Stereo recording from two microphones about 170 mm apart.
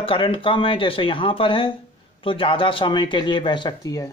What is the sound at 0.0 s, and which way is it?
Speech, 30° left (ahead or behind).